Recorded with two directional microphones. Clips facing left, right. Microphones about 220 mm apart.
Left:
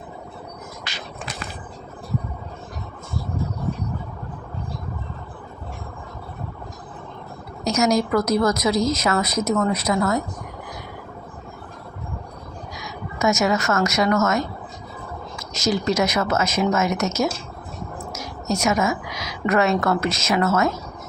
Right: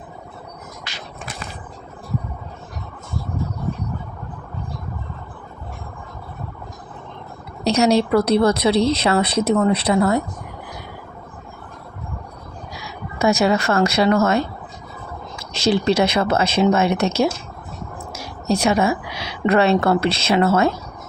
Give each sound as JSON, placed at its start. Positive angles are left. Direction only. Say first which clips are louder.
{"t": 7.6, "sound": "a woman's voice", "louder": "right 3 dB", "side_deg": -30}
{"t": 12.8, "sound": "a woman's voice", "louder": "right 3 dB", "side_deg": -30}
{"t": 15.5, "sound": "a woman's voice", "louder": "right 4 dB", "side_deg": -30}